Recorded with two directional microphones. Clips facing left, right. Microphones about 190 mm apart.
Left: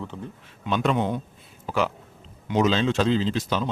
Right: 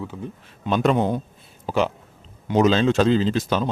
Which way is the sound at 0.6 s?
40° right (ahead or behind).